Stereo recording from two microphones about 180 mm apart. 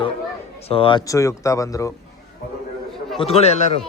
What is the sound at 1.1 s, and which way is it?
Speech, 15° left (ahead or behind).